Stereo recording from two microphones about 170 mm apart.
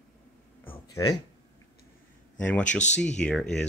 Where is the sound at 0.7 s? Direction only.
20° left (ahead or behind).